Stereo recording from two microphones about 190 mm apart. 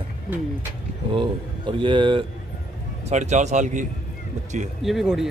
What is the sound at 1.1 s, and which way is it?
Speech, 25° right (ahead or behind).